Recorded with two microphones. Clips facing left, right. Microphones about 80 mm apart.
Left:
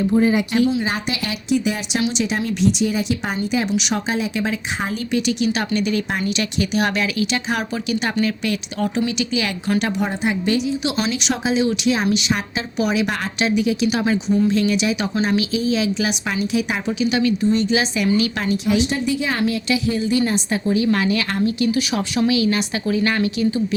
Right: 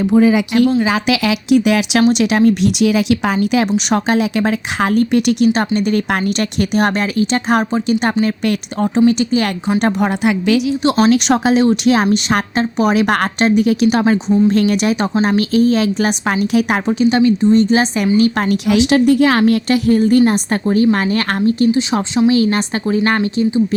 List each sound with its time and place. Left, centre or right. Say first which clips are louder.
0.0 s speech: right 5 dB; right
2.0 s speech: right 7 dB; right
2.4 s a woman's voice: right 10 dB; right
2.6 s speech: right 6 dB; right
3.9 s speech: right 7 dB; right
5.5 s a woman's voice: right 6 dB; right
6.1 s a woman's voice: right 5 dB; right
10.0 s speech: right 6 dB; right
10.8 s a woman's voice: right 10 dB; right
17.0 s a woman's voice: right 6 dB; right
18.5 s a woman's voice: right 5 dB; right
21.7 s speech: right 5 dB; right
22.3 s a woman's voice: right 5 dB; right